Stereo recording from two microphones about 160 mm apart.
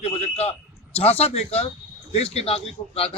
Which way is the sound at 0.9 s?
40° left (ahead or behind).